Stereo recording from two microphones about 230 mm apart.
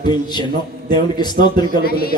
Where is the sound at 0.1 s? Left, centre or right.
Centre.